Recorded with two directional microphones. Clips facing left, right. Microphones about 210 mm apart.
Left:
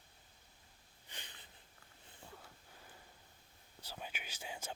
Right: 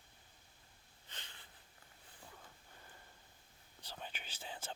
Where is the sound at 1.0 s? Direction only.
15° left (ahead or behind).